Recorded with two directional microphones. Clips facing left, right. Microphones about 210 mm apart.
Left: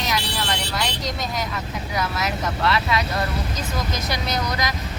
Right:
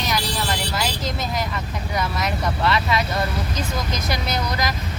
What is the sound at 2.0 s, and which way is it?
Speech, centre (ahead or behind).